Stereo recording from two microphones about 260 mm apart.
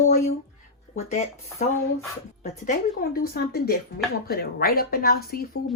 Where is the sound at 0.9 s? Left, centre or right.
Left.